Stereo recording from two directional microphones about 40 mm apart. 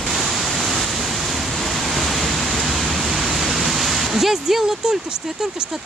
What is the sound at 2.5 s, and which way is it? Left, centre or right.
Pink noise, centre.